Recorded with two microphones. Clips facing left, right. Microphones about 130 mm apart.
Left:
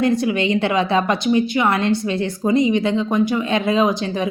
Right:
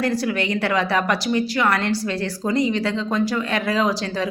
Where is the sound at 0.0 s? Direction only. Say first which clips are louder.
Left 4 dB; 20° left (ahead or behind).